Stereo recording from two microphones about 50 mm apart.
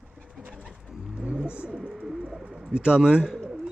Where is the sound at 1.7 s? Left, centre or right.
Centre.